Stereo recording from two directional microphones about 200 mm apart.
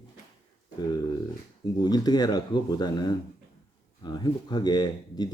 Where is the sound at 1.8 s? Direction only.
20° left (ahead or behind).